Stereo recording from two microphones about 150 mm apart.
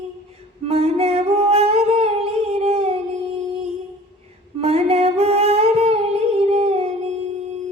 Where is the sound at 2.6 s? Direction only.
45° right (ahead or behind).